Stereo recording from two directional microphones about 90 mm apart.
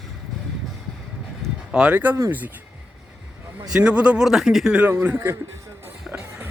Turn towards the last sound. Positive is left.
turn(degrees=-10)  # may be behind; listen again after turning